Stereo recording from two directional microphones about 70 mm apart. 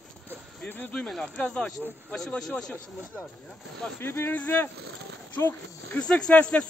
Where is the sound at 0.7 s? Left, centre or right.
Left.